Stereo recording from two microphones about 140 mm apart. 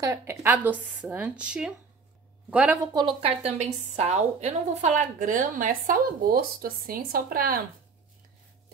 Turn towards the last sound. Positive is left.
turn(degrees=-90)